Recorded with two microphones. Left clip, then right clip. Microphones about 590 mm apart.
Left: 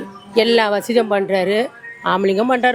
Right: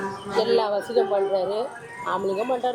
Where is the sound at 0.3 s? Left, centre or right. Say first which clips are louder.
Left 7 dB; left.